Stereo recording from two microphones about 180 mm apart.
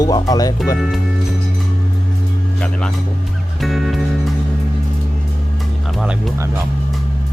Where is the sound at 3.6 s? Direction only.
Centre (ahead or behind).